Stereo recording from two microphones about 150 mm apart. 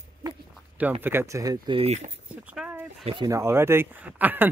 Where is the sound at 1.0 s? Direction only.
15° right (ahead or behind).